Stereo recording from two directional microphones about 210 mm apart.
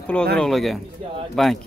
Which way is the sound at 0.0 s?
5° left (ahead or behind).